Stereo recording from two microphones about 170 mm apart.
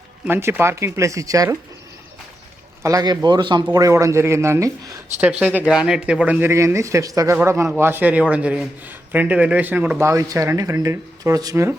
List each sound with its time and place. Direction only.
0.3 s speech: 15° right (ahead or behind)
2.8 s speech: 20° right (ahead or behind)